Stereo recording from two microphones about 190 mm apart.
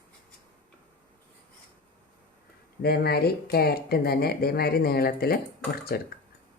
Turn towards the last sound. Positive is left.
turn(degrees=55)  # may be behind; listen again after turning